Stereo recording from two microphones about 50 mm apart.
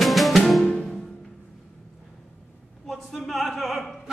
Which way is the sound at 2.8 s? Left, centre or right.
Centre.